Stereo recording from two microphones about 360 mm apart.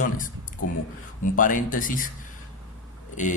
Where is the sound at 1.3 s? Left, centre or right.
Left.